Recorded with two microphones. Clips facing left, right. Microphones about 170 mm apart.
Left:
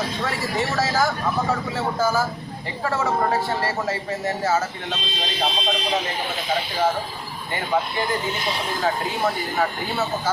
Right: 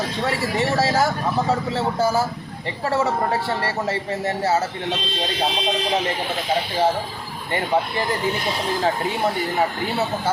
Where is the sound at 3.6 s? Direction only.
30° right (ahead or behind).